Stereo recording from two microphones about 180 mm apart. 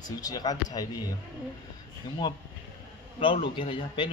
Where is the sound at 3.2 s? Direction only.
30° left (ahead or behind).